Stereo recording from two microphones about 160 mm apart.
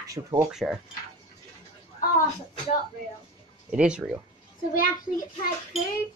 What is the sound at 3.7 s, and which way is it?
Speech, 5° right (ahead or behind).